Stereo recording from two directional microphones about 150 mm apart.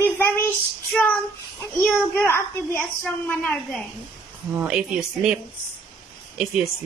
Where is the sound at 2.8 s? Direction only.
5° left (ahead or behind).